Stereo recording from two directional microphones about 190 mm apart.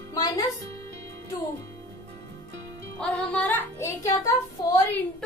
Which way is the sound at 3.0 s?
5° left (ahead or behind).